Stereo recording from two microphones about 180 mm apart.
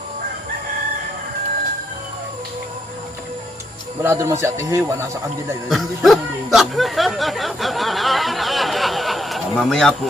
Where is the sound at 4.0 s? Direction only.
15° right (ahead or behind).